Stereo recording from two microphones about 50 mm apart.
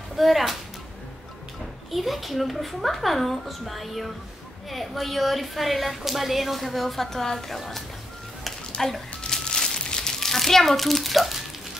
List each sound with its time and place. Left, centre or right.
0.1 s speech: centre
1.9 s a woman's voice: centre
9.3 s crumpling: centre